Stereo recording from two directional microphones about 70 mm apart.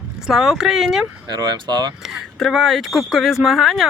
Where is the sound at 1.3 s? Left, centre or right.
Right.